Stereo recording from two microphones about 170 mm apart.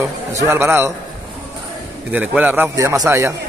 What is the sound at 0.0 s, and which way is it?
Speech, 15° right (ahead or behind).